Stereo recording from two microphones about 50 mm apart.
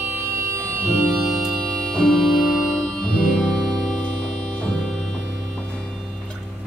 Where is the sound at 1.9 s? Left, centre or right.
Centre.